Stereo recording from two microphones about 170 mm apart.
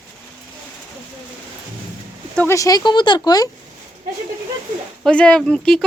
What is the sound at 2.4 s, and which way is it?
Speech, 15° left (ahead or behind).